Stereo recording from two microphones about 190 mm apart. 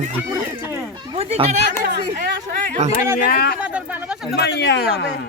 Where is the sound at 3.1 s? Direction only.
50° left (ahead or behind).